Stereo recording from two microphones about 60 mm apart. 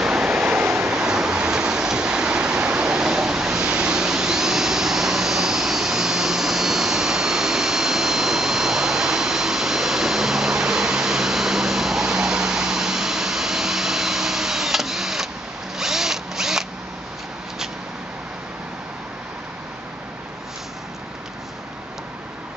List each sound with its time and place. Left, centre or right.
0.0 s waves: centre
0.4 s waves: right
0.7 s a sound: centre
15.8 s drill: centre